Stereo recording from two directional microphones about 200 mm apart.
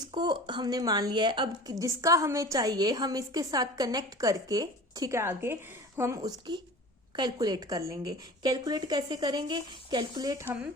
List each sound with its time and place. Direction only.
0.0 s a woman's voice: 20° right (ahead or behind)